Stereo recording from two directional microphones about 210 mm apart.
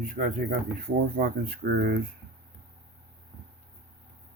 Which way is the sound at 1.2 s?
45° right (ahead or behind).